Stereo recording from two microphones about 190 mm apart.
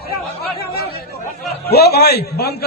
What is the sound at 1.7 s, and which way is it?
Speech, 55° left (ahead or behind).